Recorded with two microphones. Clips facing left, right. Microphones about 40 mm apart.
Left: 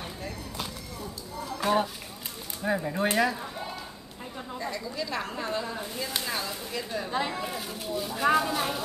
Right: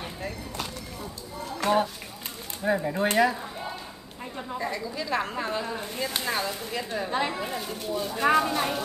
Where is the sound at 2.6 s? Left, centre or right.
Centre.